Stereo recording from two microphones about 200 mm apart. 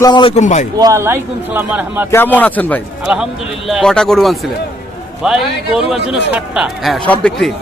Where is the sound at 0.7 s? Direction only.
15° right (ahead or behind).